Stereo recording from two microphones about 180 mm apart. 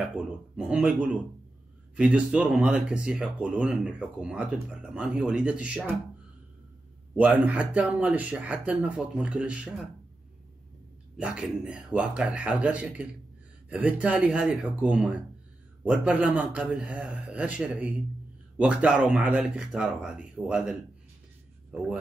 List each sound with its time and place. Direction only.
0.1 s speech: 5° right (ahead or behind)
7.2 s speech: 10° right (ahead or behind)
11.1 s speech: 5° right (ahead or behind)